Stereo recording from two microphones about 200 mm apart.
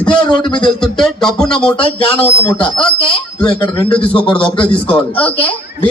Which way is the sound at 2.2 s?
10° left (ahead or behind).